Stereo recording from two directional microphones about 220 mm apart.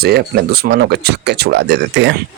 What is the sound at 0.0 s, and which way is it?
Speech, 45° right (ahead or behind).